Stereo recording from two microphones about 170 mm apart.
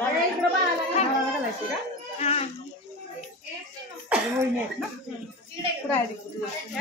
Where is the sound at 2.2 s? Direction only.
40° left (ahead or behind).